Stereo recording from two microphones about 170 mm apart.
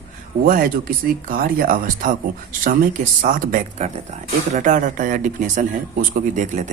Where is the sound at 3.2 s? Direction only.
50° right (ahead or behind).